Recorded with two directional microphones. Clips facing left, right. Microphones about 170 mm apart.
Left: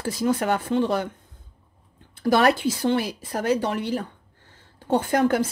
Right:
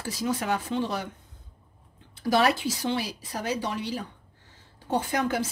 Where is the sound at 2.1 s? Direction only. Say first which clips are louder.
Left 4 dB; 55° left (ahead or behind).